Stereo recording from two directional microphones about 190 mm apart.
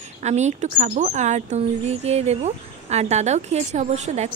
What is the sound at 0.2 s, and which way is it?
Speech, 35° right (ahead or behind).